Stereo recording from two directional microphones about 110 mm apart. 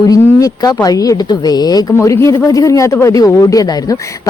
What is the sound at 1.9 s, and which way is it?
A woman's voice, 25° left (ahead or behind).